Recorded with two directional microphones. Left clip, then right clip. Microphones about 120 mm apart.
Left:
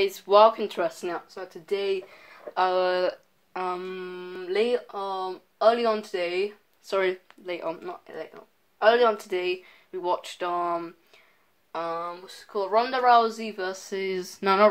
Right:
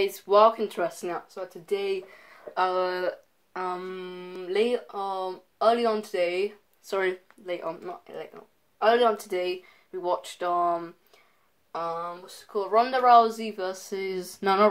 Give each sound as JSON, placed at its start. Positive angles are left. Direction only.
{"t": 0.0, "sound": "speech", "side_deg": 25}
{"t": 3.7, "sound": "speech", "side_deg": 5}